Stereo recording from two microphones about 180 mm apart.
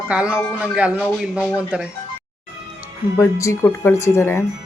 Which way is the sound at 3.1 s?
15° left (ahead or behind).